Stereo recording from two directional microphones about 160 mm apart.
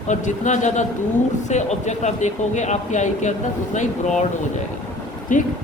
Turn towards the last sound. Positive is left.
turn(degrees=55)  # may be behind; listen again after turning